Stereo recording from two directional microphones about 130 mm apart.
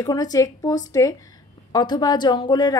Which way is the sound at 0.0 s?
30° left (ahead or behind).